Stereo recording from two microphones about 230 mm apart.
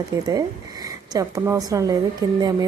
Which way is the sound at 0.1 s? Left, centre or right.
Centre.